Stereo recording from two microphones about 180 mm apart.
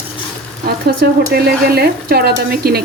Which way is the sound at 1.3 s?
60° right (ahead or behind).